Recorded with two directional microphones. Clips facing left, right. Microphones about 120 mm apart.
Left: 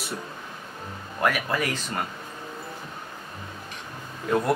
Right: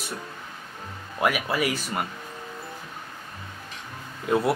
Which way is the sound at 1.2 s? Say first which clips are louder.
Right 1 dB; 10° right (ahead or behind).